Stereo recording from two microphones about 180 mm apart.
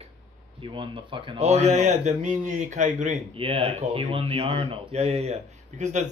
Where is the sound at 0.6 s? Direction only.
30° right (ahead or behind).